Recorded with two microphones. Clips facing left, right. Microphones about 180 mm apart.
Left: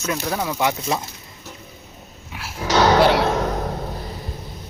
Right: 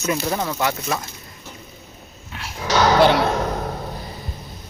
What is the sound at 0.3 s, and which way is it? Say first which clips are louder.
Speech: left 1 dB; 10° left (ahead or behind).